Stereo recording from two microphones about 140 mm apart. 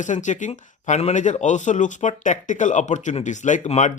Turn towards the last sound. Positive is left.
turn(degrees=55)  # may be behind; listen again after turning